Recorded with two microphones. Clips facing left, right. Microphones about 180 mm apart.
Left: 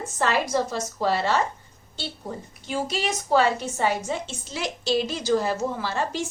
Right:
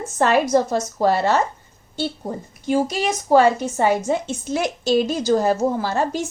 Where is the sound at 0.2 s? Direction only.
50° right (ahead or behind).